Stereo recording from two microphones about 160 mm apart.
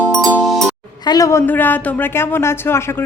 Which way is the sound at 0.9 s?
25° left (ahead or behind).